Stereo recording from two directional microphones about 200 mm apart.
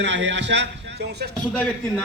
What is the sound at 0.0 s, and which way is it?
Speech, 60° right (ahead or behind).